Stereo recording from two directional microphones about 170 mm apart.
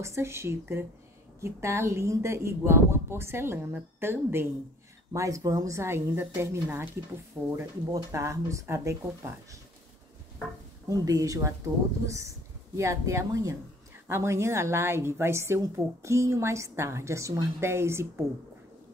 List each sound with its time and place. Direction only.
0.0 s a woman's voice: 15° right (ahead or behind)
10.9 s a woman's voice: 20° right (ahead or behind)